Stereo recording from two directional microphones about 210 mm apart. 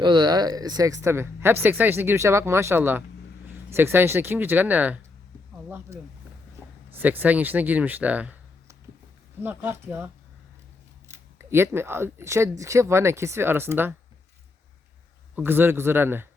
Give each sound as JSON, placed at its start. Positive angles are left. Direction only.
{"t": 0.0, "sound": "speech", "side_deg": -20}
{"t": 6.6, "sound": "a sound", "side_deg": -10}
{"t": 6.9, "sound": "speech", "side_deg": -10}
{"t": 11.3, "sound": "speech", "side_deg": -10}
{"t": 15.4, "sound": "speech", "side_deg": -10}